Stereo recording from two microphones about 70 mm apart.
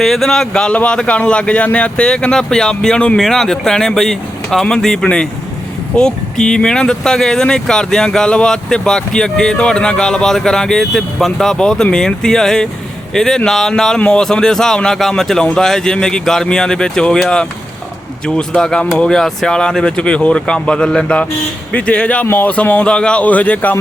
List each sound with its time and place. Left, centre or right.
0.0 s speech: centre; by 23.7 s left